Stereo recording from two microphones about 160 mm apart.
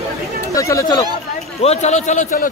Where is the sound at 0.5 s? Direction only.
20° left (ahead or behind).